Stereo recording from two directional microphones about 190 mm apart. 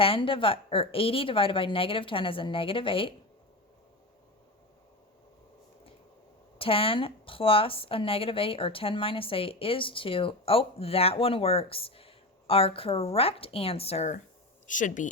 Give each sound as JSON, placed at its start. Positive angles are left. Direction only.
{"t": 0.0, "sound": "speech", "side_deg": 30}
{"t": 6.6, "sound": "speech", "side_deg": 30}